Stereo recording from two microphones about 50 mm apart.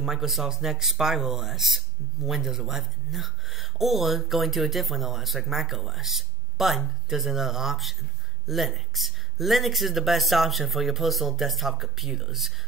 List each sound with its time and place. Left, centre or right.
0.0 s speech: centre